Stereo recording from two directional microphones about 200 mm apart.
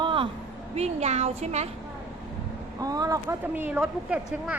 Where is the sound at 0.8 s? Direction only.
30° right (ahead or behind).